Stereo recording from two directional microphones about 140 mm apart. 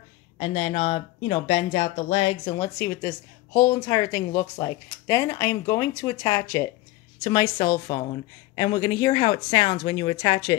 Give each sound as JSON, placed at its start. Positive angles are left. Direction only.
{"t": 0.4, "sound": "speech", "side_deg": 45}
{"t": 2.4, "sound": "a woman's voice", "side_deg": 30}